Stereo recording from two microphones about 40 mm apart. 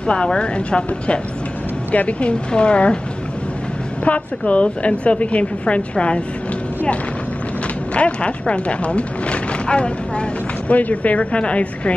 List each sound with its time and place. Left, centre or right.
0.0 s speech: left
1.9 s a woman's voice: left
4.0 s a woman's voice: left
7.9 s speech: left
10.7 s a woman's voice: left